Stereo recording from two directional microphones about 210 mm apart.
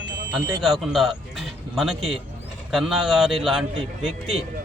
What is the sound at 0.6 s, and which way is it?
A man's voice, centre (ahead or behind).